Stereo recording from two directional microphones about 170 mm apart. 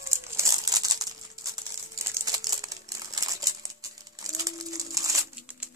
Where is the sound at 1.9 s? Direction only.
20° right (ahead or behind).